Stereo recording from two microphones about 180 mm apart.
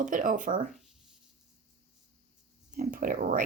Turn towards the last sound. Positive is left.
turn(degrees=-50)  # may be behind; listen again after turning